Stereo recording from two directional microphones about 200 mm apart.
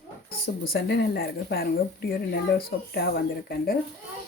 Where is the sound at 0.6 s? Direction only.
50° left (ahead or behind).